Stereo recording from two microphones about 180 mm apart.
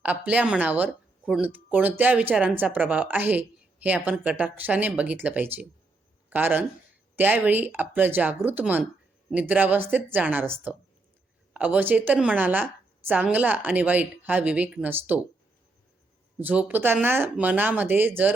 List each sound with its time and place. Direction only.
0.0 s speech: 10° right (ahead or behind)
16.4 s speech: 10° right (ahead or behind)